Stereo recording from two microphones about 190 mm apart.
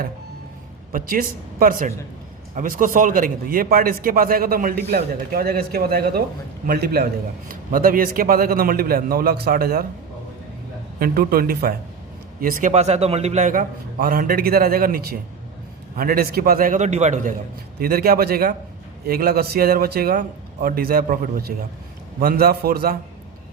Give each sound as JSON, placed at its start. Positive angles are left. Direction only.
{"t": 0.9, "sound": "a man's voice", "side_deg": -50}
{"t": 11.0, "sound": "a man's voice", "side_deg": -50}
{"t": 17.7, "sound": "a man's voice", "side_deg": -50}